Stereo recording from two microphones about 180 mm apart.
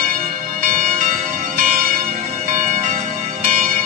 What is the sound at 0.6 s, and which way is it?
Music, 50° right (ahead or behind).